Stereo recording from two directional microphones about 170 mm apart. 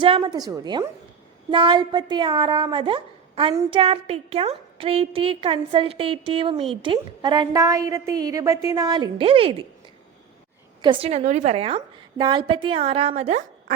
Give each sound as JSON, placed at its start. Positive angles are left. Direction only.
{"t": 0.0, "sound": "a woman's voice", "side_deg": -25}
{"t": 10.8, "sound": "a woman's voice", "side_deg": -25}
{"t": 11.1, "sound": "a woman's voice", "side_deg": -45}